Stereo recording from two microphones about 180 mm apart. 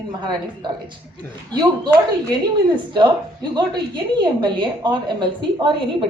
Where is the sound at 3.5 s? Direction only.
25° right (ahead or behind).